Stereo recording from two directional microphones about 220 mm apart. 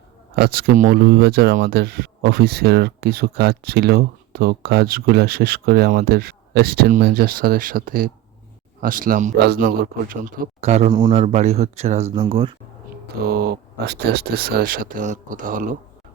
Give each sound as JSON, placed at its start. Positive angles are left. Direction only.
{"t": 0.3, "sound": "a man's voice", "side_deg": -45}
{"t": 13.2, "sound": "speech", "side_deg": -45}